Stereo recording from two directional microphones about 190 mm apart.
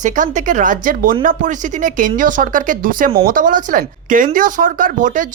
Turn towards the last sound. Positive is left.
turn(degrees=-45)  # may be behind; listen again after turning